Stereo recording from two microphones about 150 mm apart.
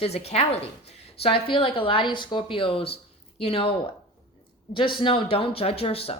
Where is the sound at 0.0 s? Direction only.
45° left (ahead or behind).